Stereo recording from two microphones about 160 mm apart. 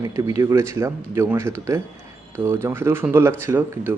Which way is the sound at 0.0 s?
20° right (ahead or behind).